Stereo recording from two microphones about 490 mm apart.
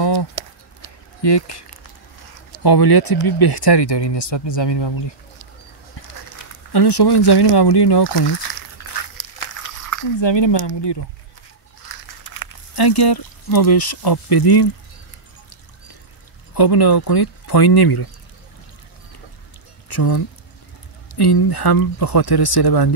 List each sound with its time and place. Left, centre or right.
0.0 s a sound: left
1.2 s speech: left
2.6 s speech: left
6.7 s speech: left
8.8 s a sound: left
10.2 s speech: left
12.4 s speech: left
16.5 s speech: left
19.9 s speech: left